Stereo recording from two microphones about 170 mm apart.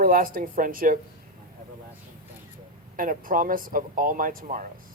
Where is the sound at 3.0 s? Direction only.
55° right (ahead or behind).